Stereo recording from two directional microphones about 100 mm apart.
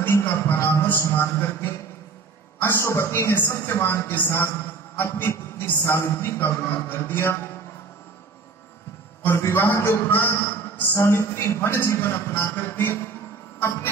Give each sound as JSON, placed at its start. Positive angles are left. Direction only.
{"t": 0.0, "sound": "music", "side_deg": 20}
{"t": 2.6, "sound": "a man's voice", "side_deg": 25}
{"t": 9.2, "sound": "a man's voice", "side_deg": 25}